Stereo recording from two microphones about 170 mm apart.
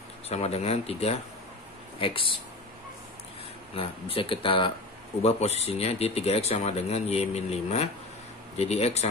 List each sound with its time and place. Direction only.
0.3 s speech: 40° left (ahead or behind)
3.7 s speech: 30° left (ahead or behind)